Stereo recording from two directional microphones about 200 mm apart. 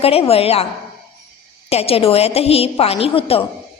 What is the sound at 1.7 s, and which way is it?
A woman's voice, 30° left (ahead or behind).